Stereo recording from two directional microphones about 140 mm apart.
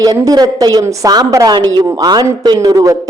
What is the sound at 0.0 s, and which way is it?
A woman's voice, 30° right (ahead or behind).